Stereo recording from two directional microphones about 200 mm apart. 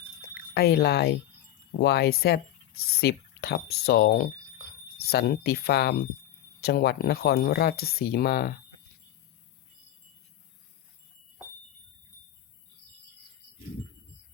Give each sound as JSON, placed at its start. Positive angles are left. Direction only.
{"t": 0.5, "sound": "speech", "side_deg": 55}